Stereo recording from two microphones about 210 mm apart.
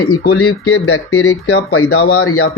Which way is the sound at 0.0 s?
90° left.